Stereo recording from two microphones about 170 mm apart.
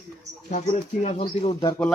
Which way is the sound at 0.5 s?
45° left (ahead or behind).